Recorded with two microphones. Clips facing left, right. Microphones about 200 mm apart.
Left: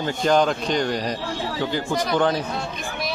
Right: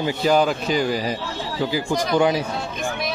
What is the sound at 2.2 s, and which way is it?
Speech, 10° right (ahead or behind).